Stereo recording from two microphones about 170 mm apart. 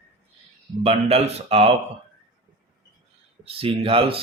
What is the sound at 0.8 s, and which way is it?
Speech, 35° right (ahead or behind).